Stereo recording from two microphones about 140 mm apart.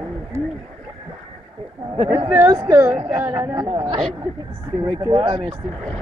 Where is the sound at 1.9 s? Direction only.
50° right (ahead or behind).